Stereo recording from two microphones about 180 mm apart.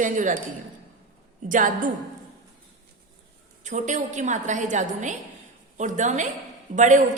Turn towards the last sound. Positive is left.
turn(degrees=-40)  # may be behind; listen again after turning